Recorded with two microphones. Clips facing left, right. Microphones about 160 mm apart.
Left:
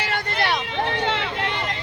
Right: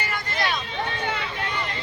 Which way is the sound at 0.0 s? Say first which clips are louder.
Left 3 dB; 70° left (ahead or behind).